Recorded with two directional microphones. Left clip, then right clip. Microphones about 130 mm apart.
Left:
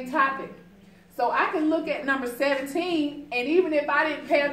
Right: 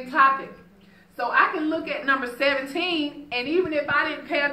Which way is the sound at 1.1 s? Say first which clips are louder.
Right 2 dB; 35° left (ahead or behind).